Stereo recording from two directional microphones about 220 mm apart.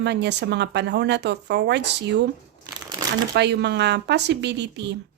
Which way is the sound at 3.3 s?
50° right (ahead or behind).